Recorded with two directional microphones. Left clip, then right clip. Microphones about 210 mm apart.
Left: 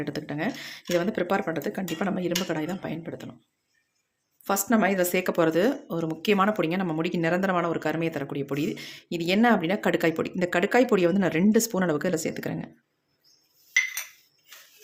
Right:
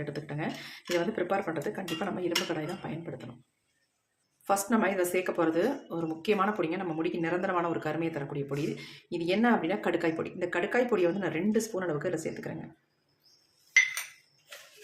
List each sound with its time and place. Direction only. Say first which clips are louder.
0.0 s speech: left 5 dB; 40° left (ahead or behind)
4.4 s speech: left 3 dB; 40° left (ahead or behind)